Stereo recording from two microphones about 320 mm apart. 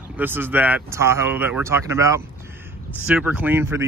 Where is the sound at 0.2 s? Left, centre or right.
Centre.